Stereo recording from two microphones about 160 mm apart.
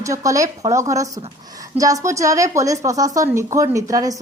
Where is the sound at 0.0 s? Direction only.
20° right (ahead or behind).